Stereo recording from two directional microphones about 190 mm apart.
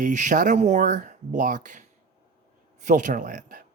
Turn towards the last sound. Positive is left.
turn(degrees=-45)  # may be behind; listen again after turning